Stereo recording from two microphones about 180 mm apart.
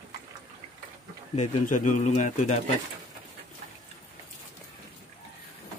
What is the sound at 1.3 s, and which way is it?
Speech, 45° left (ahead or behind).